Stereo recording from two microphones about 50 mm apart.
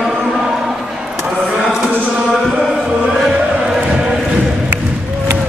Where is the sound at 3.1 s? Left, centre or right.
Centre.